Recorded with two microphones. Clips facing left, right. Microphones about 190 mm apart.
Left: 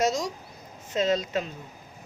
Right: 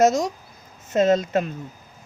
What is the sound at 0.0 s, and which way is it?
A woman's voice, 50° right (ahead or behind).